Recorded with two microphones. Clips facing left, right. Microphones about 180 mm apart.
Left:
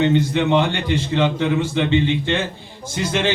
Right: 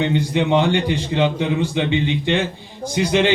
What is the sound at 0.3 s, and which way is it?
A man's voice, 15° right (ahead or behind).